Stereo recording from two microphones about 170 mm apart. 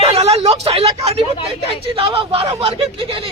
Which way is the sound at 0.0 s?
35° right (ahead or behind).